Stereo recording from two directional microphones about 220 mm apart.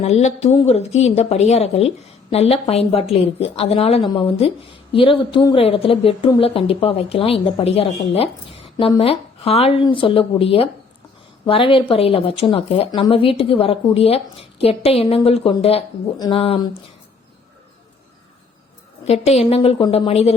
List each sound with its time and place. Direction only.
0.0 s a woman's voice: 30° left (ahead or behind)
19.0 s a woman's voice: 30° left (ahead or behind)